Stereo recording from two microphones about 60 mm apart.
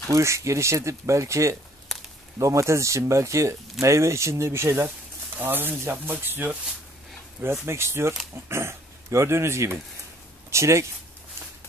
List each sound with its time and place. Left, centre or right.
0.1 s speech: right
7.6 s speech: right